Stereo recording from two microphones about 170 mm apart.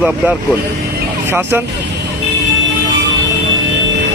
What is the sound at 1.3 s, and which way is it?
Speech, 15° right (ahead or behind).